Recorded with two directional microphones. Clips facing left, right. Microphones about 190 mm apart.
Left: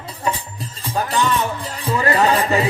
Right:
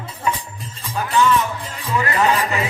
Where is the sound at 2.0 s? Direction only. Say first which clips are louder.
Left 2 dB; 35° left (ahead or behind).